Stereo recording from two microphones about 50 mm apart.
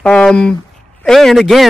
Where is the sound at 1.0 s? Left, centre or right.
Centre.